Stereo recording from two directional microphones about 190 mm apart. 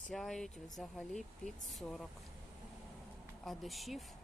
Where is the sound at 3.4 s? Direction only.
Centre (ahead or behind).